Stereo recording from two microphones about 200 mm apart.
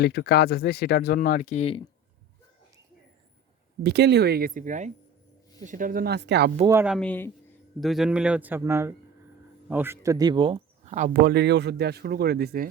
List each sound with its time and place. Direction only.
0.0 s speech: 55° left (ahead or behind); by 1.9 s 30° left (ahead or behind)
3.8 s speech: 55° right (ahead or behind)
6.7 s speech: 10° right (ahead or behind)
6.9 s speech: 5° left (ahead or behind); by 12.6 s 50° right (ahead or behind)